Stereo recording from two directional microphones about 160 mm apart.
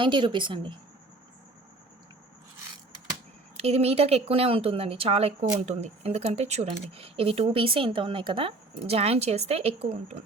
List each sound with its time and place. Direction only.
0.0 s speech: 30° right (ahead or behind)
3.6 s speech: 40° right (ahead or behind)